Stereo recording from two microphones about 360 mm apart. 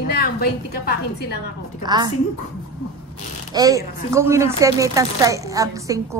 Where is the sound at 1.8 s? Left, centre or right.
Centre.